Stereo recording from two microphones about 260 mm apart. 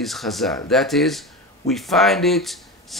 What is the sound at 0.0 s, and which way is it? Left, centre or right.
Speech, centre.